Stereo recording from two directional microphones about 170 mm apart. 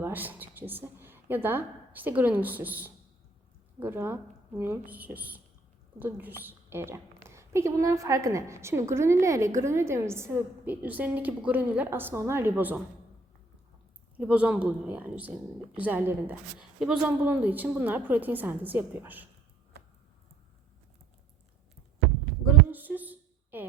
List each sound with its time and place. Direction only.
0.0 s a woman's voice: 10° right (ahead or behind)
14.2 s a woman's voice: 5° right (ahead or behind)
22.7 s a sound: 10° right (ahead or behind)